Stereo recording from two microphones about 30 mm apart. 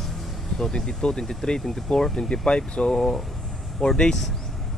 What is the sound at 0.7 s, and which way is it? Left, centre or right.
Speech, left.